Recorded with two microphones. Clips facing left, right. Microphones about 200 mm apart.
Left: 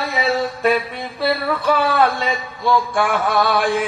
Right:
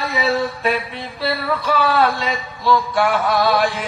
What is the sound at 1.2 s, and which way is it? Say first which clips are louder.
Music: left 2 dB; 55° left (ahead or behind).